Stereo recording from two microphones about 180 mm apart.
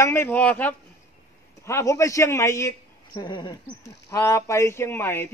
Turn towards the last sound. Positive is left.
turn(degrees=15)  # may be behind; listen again after turning